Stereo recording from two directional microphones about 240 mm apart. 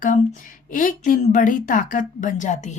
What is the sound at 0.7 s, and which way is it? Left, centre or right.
A woman's voice, left.